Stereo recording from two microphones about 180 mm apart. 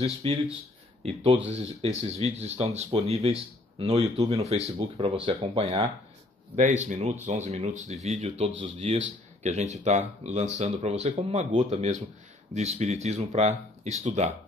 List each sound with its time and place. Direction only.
0.2 s speech: 30° right (ahead or behind)